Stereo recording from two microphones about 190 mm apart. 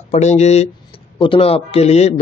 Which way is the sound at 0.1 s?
35° left (ahead or behind).